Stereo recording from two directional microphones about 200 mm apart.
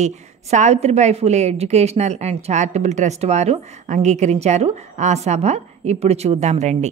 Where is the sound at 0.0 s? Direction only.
35° right (ahead or behind).